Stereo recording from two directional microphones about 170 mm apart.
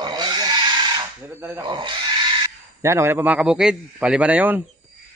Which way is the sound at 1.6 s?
30° right (ahead or behind).